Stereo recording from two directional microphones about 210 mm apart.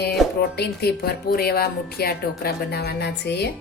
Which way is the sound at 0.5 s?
50° left (ahead or behind).